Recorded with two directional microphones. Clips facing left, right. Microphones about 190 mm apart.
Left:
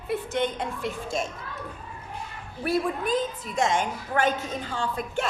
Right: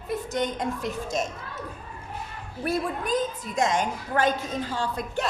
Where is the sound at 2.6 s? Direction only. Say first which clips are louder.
Left 2 dB; 40° right (ahead or behind).